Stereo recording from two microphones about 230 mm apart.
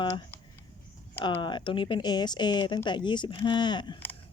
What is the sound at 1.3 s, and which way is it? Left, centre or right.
Speech, left.